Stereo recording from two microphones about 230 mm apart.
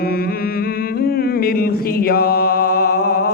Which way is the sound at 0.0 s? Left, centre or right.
Left.